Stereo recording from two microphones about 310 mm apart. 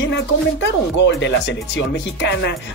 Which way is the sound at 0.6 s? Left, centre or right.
Left.